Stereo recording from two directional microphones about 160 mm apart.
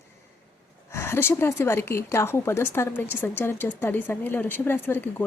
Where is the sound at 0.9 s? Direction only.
15° left (ahead or behind).